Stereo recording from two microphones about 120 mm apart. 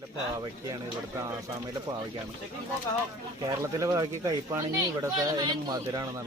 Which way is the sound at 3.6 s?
30° right (ahead or behind).